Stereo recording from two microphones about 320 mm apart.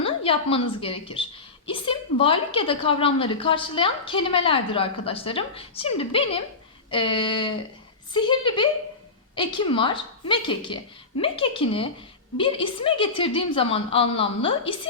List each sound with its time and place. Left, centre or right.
0.0 s a woman's voice: centre